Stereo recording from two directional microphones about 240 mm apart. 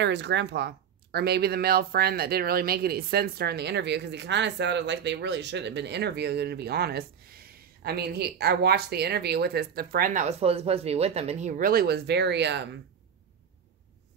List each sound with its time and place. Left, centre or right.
0.0 s speech: right